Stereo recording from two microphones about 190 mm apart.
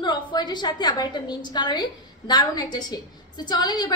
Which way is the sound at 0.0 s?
25° left (ahead or behind).